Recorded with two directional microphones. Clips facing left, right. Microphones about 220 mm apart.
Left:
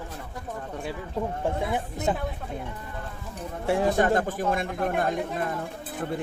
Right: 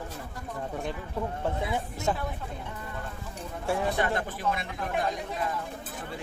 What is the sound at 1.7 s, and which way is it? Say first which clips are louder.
Speech: left 3 dB; 15° left (ahead or behind).